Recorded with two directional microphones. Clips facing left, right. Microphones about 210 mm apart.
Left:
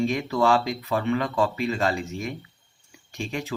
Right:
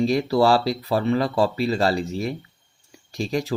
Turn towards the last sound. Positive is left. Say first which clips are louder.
# right 6 dB
turn(degrees=-35)  # may be behind; listen again after turning